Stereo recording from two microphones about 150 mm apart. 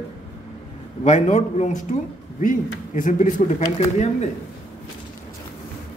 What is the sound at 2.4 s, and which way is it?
A man's voice, 60° left (ahead or behind).